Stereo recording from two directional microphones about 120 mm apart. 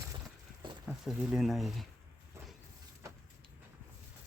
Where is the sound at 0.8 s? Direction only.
5° right (ahead or behind).